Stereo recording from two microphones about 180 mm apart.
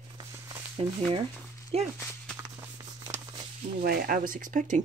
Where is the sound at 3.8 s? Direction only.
55° right (ahead or behind).